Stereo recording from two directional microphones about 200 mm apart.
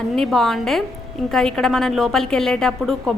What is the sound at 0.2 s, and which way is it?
A woman's voice, centre (ahead or behind).